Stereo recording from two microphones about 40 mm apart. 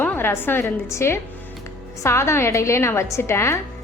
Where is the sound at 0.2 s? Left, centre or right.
Left.